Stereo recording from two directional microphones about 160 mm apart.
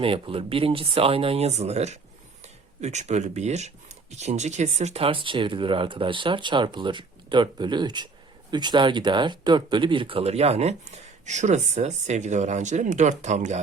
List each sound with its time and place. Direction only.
0.0 s speech: 35° right (ahead or behind)